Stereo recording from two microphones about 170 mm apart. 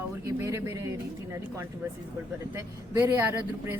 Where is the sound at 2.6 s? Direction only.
15° right (ahead or behind).